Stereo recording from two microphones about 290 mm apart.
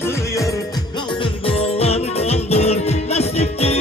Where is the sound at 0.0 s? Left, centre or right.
Centre.